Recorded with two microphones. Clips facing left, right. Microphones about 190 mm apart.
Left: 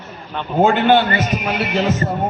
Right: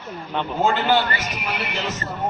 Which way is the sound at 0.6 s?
55° left (ahead or behind).